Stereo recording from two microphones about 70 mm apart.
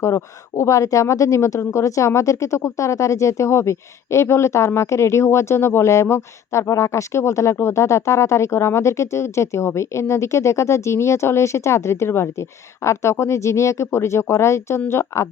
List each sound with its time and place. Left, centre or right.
0.0 s a woman's voice: left